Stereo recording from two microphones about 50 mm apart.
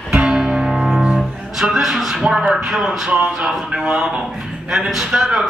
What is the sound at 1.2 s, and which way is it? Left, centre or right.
Speech, centre.